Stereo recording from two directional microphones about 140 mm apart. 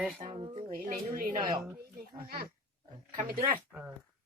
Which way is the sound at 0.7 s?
80° right.